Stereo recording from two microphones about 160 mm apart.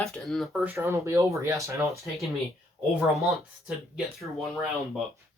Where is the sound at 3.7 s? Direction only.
5° right (ahead or behind).